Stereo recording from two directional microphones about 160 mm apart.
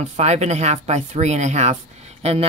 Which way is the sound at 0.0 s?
45° right (ahead or behind).